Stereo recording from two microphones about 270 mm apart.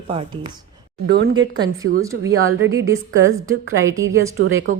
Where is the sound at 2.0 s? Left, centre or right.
Centre.